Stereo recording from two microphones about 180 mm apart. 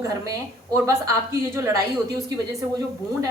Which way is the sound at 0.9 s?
15° right (ahead or behind).